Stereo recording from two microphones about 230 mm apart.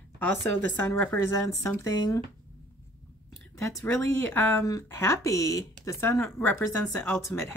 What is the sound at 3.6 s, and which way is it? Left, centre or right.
Speech, centre.